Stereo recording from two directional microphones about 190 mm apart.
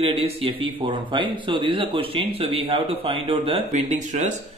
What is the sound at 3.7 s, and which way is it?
Speech, 40° right (ahead or behind).